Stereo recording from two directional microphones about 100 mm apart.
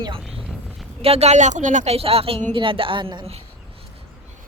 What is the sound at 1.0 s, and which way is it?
A woman's voice, 85° right.